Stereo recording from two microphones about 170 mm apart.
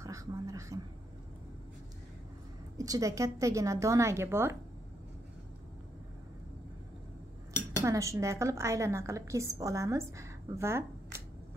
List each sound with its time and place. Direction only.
0.0 s a sound: 20° right (ahead or behind)
2.8 s a woman's voice: 20° right (ahead or behind)
7.8 s a woman's voice: 20° right (ahead or behind)